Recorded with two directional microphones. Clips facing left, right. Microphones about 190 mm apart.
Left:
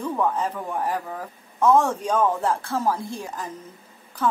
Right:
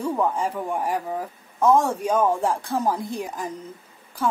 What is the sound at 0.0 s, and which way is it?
A woman's voice, 10° right (ahead or behind).